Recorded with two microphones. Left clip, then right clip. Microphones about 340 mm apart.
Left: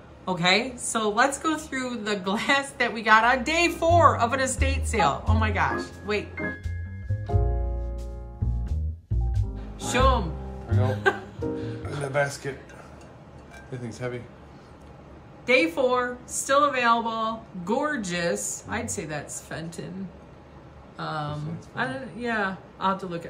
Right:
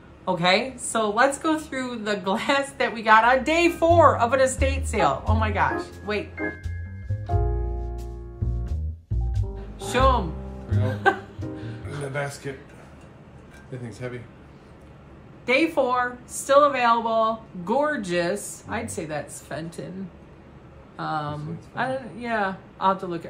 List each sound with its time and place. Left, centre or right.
0.2 s a woman's voice: centre
7.3 s music: centre
9.8 s a woman's voice: centre
12.1 s speech: left
13.7 s speech: centre
15.4 s a woman's voice: centre
20.9 s a woman's voice: centre